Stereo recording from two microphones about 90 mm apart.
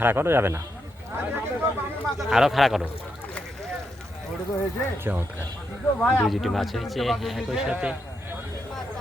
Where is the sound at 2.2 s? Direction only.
5° right (ahead or behind).